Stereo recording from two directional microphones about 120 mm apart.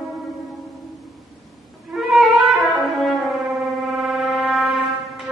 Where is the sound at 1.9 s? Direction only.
Centre (ahead or behind).